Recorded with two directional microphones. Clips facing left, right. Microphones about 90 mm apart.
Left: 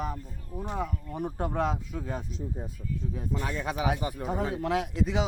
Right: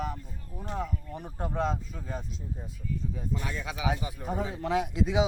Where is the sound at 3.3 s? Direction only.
50° left (ahead or behind).